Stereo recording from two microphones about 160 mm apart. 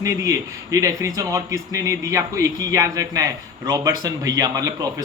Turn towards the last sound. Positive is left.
turn(degrees=-20)  # may be behind; listen again after turning